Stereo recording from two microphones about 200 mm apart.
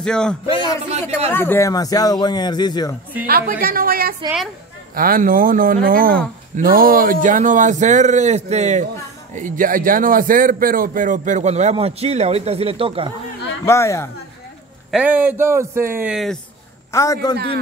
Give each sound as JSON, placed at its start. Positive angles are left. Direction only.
{"t": 0.0, "sound": "speech", "side_deg": 5}
{"t": 0.5, "sound": "a man's voice", "side_deg": 25}
{"t": 1.3, "sound": "a man's voice", "side_deg": 10}
{"t": 3.3, "sound": "a man's voice", "side_deg": -45}
{"t": 13.7, "sound": "a man's voice", "side_deg": 15}
{"t": 14.9, "sound": "a man's voice", "side_deg": -5}
{"t": 16.9, "sound": "a man's voice", "side_deg": 15}